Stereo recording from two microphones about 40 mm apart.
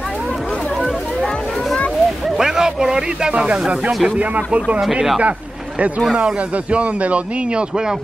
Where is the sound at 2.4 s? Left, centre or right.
Centre.